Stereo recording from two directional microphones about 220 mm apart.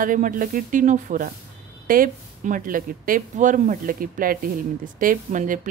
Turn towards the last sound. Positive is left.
turn(degrees=-35)  # may be behind; listen again after turning